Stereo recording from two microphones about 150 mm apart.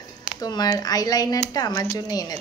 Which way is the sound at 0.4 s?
25° left (ahead or behind).